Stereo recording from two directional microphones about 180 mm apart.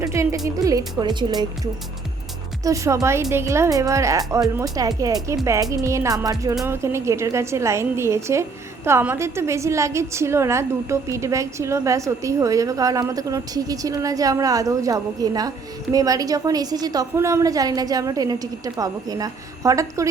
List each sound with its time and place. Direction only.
0.0 s a woman's voice: 15° right (ahead or behind)
2.6 s a woman's voice: 15° right (ahead or behind)